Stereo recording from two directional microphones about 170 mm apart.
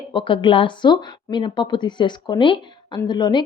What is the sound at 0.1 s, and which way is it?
A woman's voice, 30° left (ahead or behind).